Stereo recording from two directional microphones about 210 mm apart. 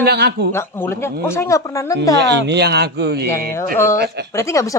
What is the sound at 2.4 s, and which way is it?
A man's voice, 55° right (ahead or behind).